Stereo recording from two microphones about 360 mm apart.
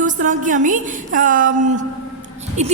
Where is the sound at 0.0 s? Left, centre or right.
Right.